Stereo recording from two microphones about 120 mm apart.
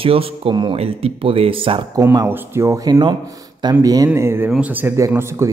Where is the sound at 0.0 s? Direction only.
50° right (ahead or behind).